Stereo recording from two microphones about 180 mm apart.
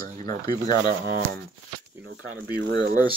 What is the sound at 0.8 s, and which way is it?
Speech, 55° right (ahead or behind).